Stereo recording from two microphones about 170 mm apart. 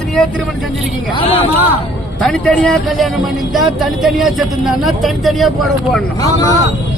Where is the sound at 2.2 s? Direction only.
5° left (ahead or behind).